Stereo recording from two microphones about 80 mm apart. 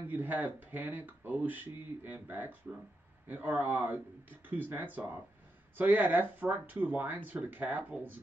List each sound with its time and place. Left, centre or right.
0.0 s speech: right